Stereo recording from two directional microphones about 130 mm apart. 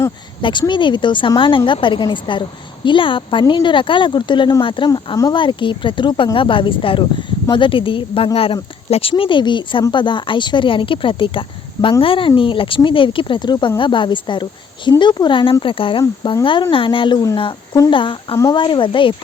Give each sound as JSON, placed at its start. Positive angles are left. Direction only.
{"t": 0.7, "sound": "speech", "side_deg": 40}
{"t": 5.1, "sound": "speech", "side_deg": 25}
{"t": 5.4, "sound": "speech", "side_deg": 40}